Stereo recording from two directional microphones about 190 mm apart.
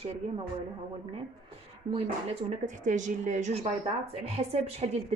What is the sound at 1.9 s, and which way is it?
Speech, 30° right (ahead or behind).